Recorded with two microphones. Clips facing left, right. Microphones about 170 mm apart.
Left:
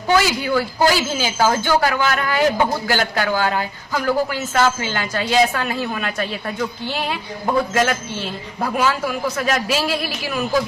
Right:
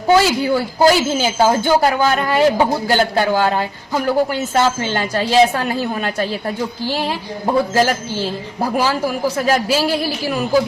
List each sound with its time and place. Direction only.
0.1 s a man's voice: 25° right (ahead or behind)